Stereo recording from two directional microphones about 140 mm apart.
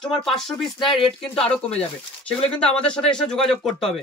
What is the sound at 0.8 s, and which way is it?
Speech, 40° left (ahead or behind).